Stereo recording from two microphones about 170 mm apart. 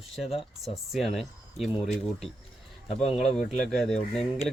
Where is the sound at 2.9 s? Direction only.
40° left (ahead or behind).